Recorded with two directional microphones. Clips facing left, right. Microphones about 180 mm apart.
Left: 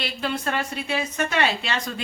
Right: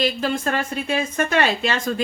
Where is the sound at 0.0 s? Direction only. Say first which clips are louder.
Right 6 dB; 40° right (ahead or behind).